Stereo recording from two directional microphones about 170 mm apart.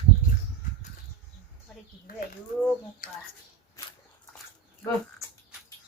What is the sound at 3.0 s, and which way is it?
Speech, 55° left (ahead or behind).